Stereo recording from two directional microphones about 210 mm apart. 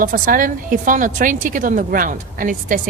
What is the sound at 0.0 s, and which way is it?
A woman's voice, 40° right (ahead or behind).